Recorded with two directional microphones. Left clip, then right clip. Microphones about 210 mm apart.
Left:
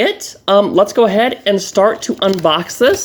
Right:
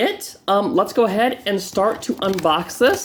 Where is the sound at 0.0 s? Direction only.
35° left (ahead or behind).